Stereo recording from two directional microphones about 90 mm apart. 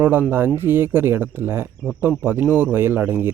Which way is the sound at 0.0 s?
25° right (ahead or behind).